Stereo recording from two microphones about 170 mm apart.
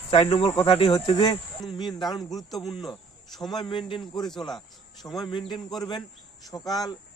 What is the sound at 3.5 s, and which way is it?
Speech, 25° left (ahead or behind).